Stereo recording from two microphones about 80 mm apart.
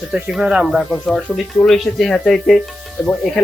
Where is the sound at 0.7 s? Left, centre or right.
Centre.